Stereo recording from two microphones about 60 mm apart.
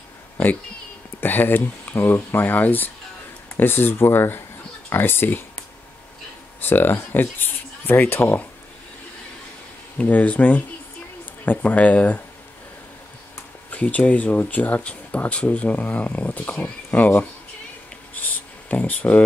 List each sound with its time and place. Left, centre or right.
1.2 s speech: left
6.6 s speech: left
9.9 s speech: left
13.7 s speech: left
18.7 s speech: left